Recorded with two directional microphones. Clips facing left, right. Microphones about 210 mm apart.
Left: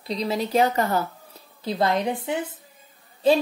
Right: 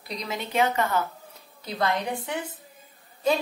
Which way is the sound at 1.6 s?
25° left (ahead or behind).